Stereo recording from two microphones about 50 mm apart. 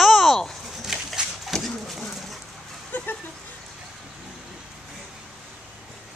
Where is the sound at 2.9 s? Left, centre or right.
Left.